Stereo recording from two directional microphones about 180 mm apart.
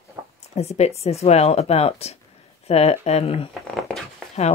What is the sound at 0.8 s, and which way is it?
Speech, 35° left (ahead or behind).